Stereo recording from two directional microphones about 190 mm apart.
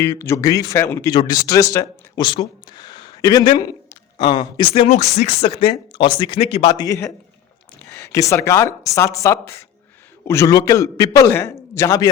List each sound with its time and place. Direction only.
0.0 s a man's voice: 15° left (ahead or behind)